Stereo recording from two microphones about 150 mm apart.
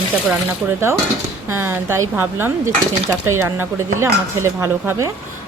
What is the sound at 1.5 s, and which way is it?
Speech, 15° right (ahead or behind).